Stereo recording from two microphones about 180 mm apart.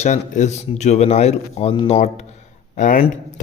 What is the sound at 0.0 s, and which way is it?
Speech, 40° left (ahead or behind).